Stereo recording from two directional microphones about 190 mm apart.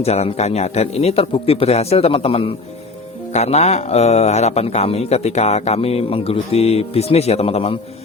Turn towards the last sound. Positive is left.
turn(degrees=30)  # may be behind; listen again after turning